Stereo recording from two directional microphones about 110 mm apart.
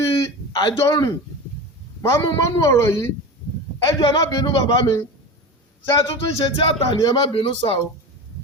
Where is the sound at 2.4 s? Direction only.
25° left (ahead or behind).